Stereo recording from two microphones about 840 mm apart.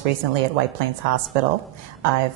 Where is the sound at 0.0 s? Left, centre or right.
Right.